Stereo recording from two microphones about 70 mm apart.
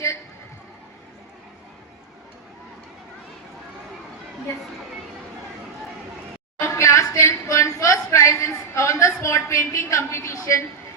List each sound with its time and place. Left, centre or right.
6.6 s speech: left